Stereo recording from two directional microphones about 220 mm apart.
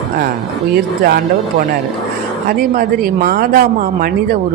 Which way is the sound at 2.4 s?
40° right (ahead or behind).